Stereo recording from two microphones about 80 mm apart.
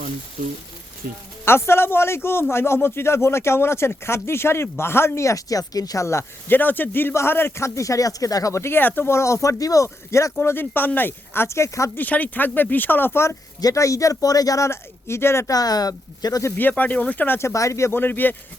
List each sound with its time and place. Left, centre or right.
1.5 s speech: left
6.5 s speech: left
10.4 s speech: left
11.4 s speech: left
11.9 s speech: centre
13.6 s speech: left
15.4 s speech: left
16.6 s speech: left
17.5 s speech: left